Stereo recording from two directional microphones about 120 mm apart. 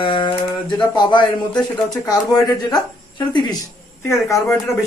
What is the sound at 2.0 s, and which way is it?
Speech, 30° left (ahead or behind).